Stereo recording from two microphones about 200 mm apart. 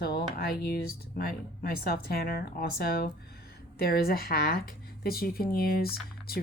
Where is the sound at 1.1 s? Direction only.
50° left (ahead or behind).